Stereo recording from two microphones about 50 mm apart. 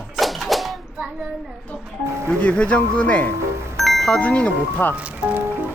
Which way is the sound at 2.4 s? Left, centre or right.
Left.